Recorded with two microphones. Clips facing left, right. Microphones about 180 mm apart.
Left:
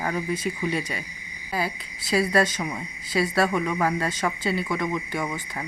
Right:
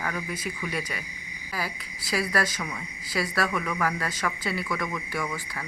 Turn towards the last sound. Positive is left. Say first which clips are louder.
# left 4 dB
turn(degrees=25)  # may be behind; listen again after turning